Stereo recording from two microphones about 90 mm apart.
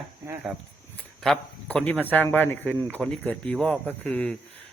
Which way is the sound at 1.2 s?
5° left (ahead or behind).